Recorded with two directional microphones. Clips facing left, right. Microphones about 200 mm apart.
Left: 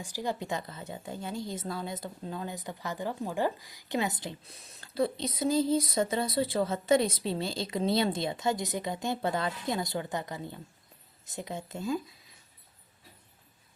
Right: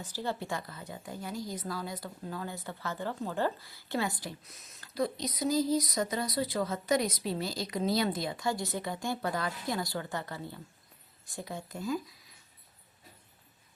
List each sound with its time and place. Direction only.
0.0 s a woman's voice: 15° left (ahead or behind)